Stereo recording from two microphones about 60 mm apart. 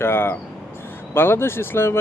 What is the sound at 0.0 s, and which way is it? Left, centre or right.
Speech, left.